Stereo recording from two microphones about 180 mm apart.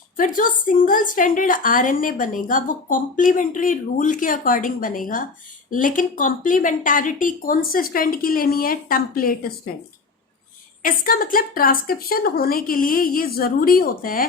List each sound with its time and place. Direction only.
0.2 s a woman's voice: 50° left (ahead or behind)
10.8 s a woman's voice: 50° left (ahead or behind)